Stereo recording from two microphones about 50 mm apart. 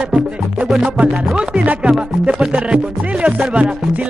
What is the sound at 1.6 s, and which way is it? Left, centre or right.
Music, right.